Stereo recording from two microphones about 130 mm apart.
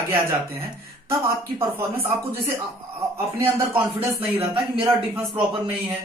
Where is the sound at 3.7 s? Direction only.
45° right (ahead or behind).